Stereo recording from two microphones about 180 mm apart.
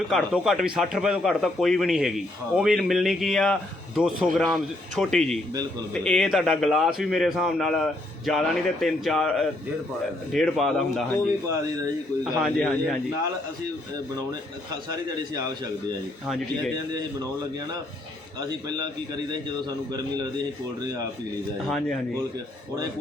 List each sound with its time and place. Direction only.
0.1 s speech: centre (ahead or behind)
12.2 s speech: centre (ahead or behind)
16.2 s speech: centre (ahead or behind)
18.3 s a man's voice: 25° right (ahead or behind)